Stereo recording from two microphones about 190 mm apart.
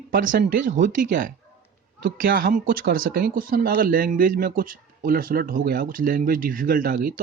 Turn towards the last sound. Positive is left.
turn(degrees=-50)  # may be behind; listen again after turning